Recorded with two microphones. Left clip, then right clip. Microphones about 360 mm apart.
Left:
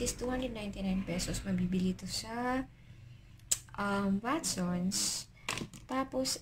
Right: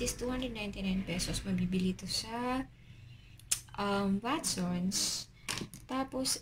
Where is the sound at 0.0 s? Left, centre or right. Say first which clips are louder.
Left 1 dB; centre.